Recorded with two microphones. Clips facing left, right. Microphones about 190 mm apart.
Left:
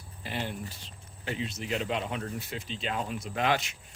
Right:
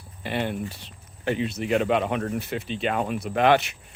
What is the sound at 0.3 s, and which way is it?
Speech, 65° right (ahead or behind).